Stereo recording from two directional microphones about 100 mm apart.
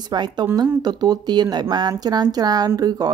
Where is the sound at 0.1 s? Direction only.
45° right (ahead or behind).